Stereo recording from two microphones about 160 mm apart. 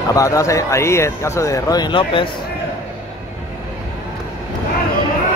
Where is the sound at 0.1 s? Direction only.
20° left (ahead or behind).